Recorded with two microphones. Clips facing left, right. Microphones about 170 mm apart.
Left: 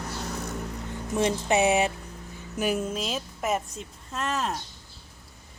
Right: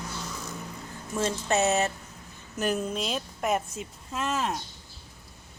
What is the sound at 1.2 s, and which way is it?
A woman's voice, 15° left (ahead or behind).